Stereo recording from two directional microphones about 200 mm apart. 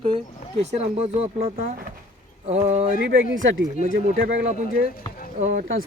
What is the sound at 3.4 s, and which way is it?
Speech, 70° right (ahead or behind).